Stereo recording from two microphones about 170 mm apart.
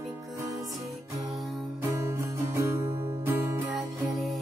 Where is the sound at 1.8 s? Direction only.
15° right (ahead or behind).